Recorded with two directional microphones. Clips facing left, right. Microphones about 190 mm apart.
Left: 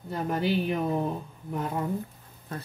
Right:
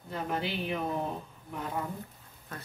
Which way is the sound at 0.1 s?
40° left (ahead or behind).